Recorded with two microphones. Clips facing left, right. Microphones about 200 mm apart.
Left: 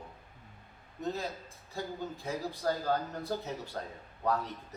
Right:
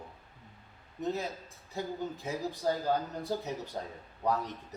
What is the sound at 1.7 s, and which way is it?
A man's voice, 15° right (ahead or behind).